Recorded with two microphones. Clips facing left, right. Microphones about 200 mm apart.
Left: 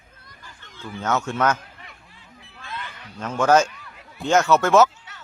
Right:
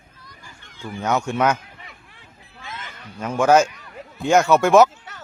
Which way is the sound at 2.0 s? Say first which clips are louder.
Right 1 dB; 60° right (ahead or behind).